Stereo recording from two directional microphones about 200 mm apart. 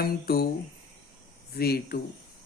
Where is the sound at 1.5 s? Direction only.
50° left (ahead or behind).